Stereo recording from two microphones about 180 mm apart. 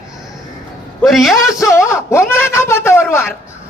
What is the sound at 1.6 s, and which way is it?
Speech, 15° left (ahead or behind).